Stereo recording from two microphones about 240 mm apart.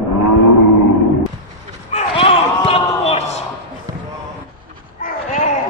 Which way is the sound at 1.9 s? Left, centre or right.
Left.